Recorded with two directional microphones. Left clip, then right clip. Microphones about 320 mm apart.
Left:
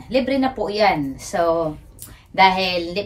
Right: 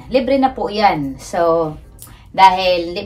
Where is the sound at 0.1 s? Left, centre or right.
Centre.